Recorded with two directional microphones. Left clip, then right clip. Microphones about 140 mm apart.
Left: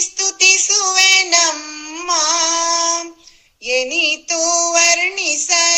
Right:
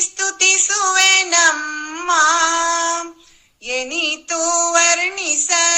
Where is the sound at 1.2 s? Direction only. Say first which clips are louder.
Right 1 dB; 15° left (ahead or behind).